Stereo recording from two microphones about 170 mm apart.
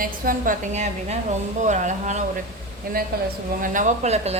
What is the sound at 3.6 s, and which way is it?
Speech, 50° right (ahead or behind).